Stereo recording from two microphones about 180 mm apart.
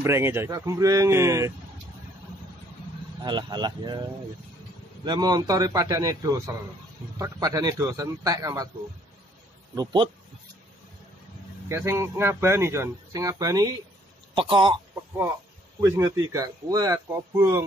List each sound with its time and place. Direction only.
0.0 s speech: 15° right (ahead or behind)
3.2 s a man's voice: 25° right (ahead or behind)
5.0 s a man's voice: 25° right (ahead or behind)
11.7 s a man's voice: 15° right (ahead or behind)
15.8 s a man's voice: 20° right (ahead or behind)